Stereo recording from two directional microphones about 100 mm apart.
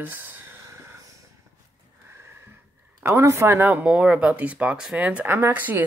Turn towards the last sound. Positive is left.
turn(degrees=-15)  # may be behind; listen again after turning